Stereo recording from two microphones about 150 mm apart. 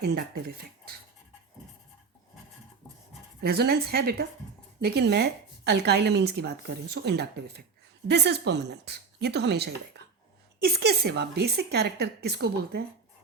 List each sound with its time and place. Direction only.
0.0 s a woman's voice: 90° right
3.4 s a woman's voice: 90° right
10.0 s a sound: 90° right
10.6 s a woman's voice: 90° right